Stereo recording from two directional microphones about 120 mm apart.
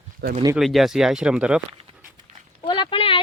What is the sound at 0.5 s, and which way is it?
Speech, centre (ahead or behind).